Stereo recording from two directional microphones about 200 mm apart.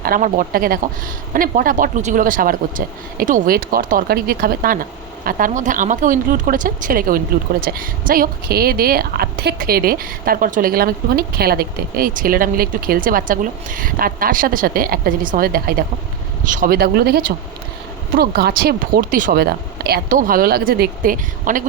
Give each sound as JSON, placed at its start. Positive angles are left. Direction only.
{"t": 0.0, "sound": "a woman's voice", "side_deg": -45}